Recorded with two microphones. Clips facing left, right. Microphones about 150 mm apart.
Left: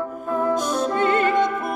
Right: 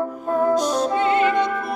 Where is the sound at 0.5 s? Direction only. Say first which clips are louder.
Right 2 dB; 50° left (ahead or behind).